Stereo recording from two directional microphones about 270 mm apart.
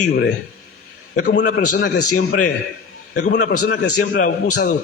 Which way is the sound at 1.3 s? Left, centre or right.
Left.